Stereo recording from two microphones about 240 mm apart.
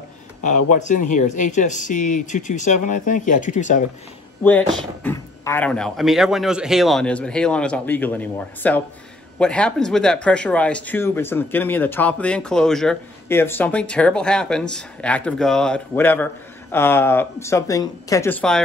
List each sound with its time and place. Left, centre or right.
0.7 s speech: left
4.4 s speech: centre